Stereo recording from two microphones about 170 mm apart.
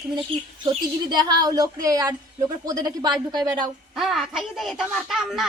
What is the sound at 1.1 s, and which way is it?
Speech, 25° right (ahead or behind).